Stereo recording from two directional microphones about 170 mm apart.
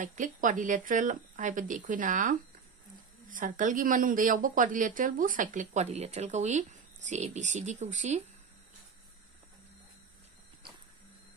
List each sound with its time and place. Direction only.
0.0 s a woman's voice: 50° right (ahead or behind)